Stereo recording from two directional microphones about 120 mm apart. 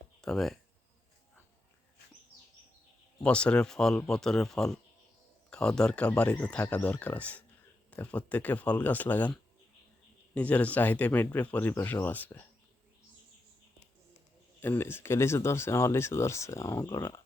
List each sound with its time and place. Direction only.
0.2 s speech: centre (ahead or behind)
3.2 s speech: 10° left (ahead or behind)
10.3 s speech: 10° left (ahead or behind)
14.6 s speech: 20° left (ahead or behind)